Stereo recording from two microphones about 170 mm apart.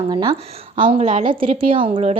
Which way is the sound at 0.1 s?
25° right (ahead or behind).